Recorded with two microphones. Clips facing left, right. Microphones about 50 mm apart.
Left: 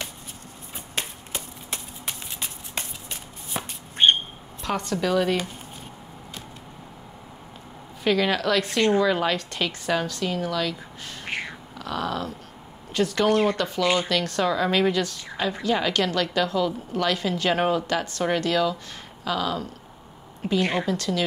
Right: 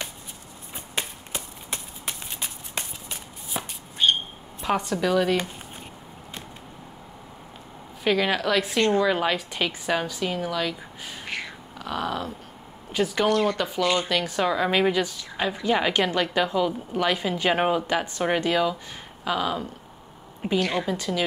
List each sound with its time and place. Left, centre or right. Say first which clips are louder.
0.9 s a sound: even; centre
3.6 s a sound: left 1 dB; centre
4.0 s a sound: left 3 dB; left
4.6 s speech: right 2 dB; centre
8.0 s a woman's voice: left 1 dB; centre
11.2 s cat: left 3 dB; left
11.8 s a woman's voice: even; centre
13.3 s speech: left 3 dB; left
13.6 s a woman's voice: left 1 dB; centre